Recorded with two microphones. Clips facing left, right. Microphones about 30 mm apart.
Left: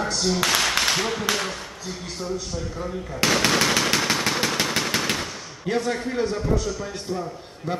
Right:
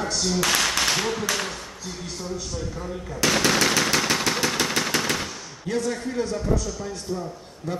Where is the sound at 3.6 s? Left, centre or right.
Centre.